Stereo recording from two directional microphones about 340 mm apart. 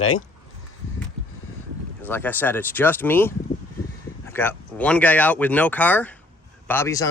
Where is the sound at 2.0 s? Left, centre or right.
Centre.